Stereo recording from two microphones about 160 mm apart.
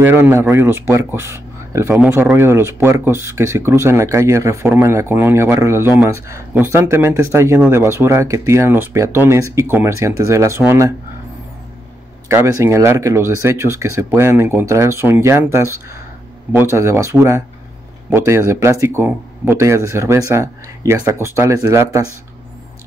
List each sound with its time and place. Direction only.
0.0 s speech: 15° right (ahead or behind)
12.3 s speech: 15° right (ahead or behind)